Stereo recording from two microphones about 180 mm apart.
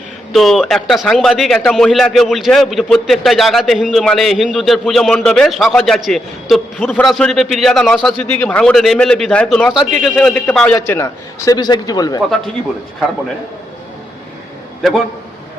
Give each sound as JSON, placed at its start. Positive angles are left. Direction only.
{"t": 0.3, "sound": "a man's voice", "side_deg": 0}